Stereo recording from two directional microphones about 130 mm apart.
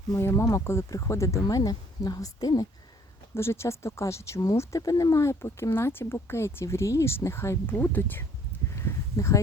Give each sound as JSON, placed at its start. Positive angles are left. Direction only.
{"t": 0.1, "sound": "speech", "side_deg": 20}
{"t": 3.3, "sound": "speech", "side_deg": 20}
{"t": 8.7, "sound": "a sound", "side_deg": 20}